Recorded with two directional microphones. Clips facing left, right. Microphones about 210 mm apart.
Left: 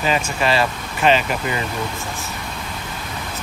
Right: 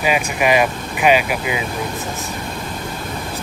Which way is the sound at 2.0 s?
20° right (ahead or behind).